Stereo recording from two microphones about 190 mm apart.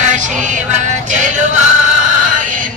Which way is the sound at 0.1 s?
40° right (ahead or behind).